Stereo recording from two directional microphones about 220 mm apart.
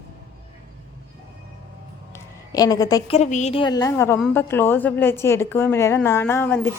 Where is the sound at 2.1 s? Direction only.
15° left (ahead or behind).